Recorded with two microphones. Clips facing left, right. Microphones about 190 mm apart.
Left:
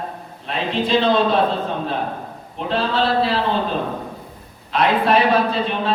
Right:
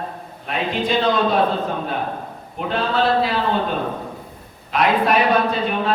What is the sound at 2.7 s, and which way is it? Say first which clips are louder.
Speech: even; 30° left (ahead or behind).